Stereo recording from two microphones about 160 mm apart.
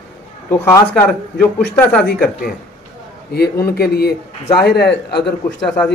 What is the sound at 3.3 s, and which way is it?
Speech, 80° left.